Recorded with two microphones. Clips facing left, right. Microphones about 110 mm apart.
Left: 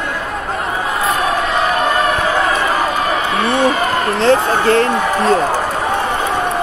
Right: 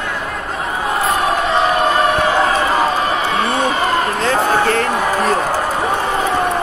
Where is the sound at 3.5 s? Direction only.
30° left (ahead or behind).